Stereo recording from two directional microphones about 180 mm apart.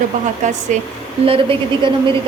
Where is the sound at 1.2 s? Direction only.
30° right (ahead or behind).